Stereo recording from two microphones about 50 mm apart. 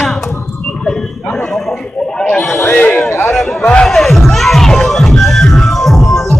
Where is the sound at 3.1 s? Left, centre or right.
Left.